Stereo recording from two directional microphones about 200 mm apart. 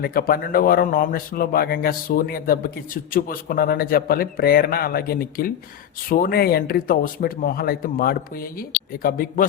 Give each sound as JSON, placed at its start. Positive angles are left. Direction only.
{"t": 0.0, "sound": "speech", "side_deg": 50}